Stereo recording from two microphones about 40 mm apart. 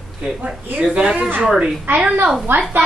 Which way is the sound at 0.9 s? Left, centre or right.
Right.